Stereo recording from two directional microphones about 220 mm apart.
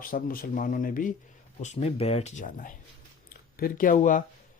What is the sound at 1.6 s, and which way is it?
Speech, 30° left (ahead or behind).